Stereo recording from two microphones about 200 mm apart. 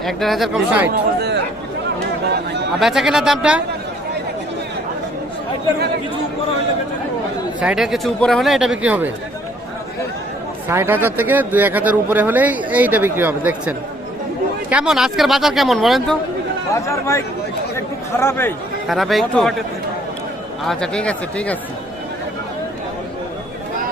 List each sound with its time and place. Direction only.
0.0 s speech: centre (ahead or behind)
0.9 s speech: 55° right (ahead or behind)
2.7 s speech: centre (ahead or behind)
7.6 s speech: 5° right (ahead or behind)
10.7 s speech: 10° right (ahead or behind)
16.7 s speech: 15° left (ahead or behind)
17.7 s chatter: 10° left (ahead or behind)
18.9 s speech: centre (ahead or behind)
20.7 s speech: 5° left (ahead or behind)